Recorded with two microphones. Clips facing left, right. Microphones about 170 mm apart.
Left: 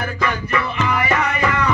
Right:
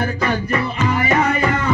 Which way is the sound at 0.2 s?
35° right (ahead or behind).